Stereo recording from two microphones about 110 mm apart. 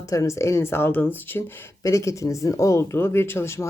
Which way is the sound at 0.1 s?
30° left (ahead or behind).